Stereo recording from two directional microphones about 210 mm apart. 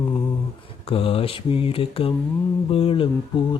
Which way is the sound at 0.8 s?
25° left (ahead or behind).